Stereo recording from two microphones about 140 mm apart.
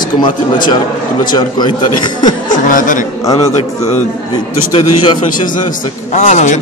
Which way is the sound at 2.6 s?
70° left (ahead or behind).